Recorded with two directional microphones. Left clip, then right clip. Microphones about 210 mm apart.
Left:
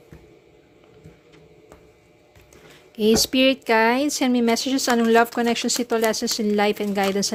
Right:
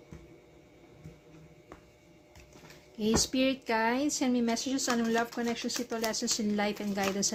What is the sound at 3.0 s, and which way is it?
Speech, 35° left (ahead or behind).